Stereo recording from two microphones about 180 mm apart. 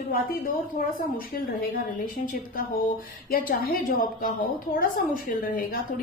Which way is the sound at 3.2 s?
55° left (ahead or behind).